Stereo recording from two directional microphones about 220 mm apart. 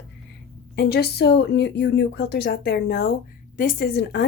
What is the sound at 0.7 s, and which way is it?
A woman's voice, 45° left (ahead or behind).